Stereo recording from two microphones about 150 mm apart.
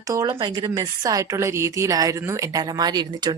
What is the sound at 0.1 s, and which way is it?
A woman's voice, 25° right (ahead or behind).